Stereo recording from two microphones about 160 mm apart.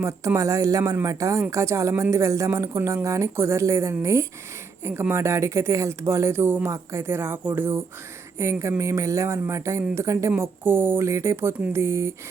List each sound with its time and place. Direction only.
0.0 s speech: 20° right (ahead or behind)